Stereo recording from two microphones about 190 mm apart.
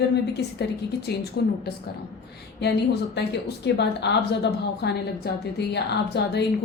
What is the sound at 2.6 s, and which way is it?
A woman's voice, 60° left (ahead or behind).